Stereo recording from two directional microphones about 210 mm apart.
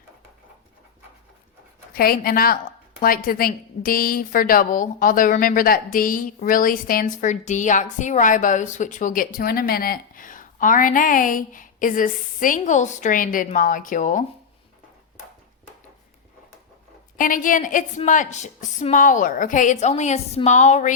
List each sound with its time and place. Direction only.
1.9 s a woman's voice: 45° left (ahead or behind)
17.2 s a woman's voice: 40° left (ahead or behind)